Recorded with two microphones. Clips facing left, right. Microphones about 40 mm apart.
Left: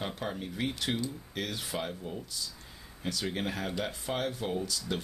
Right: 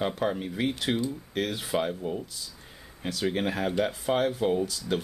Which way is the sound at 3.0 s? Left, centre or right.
Right.